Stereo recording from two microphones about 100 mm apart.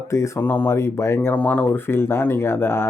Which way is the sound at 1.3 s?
15° left (ahead or behind).